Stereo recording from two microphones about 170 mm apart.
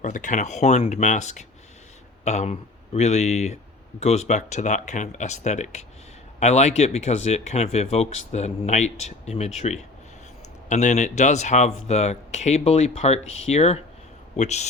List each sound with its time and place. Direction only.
0.0 s speech: 45° left (ahead or behind)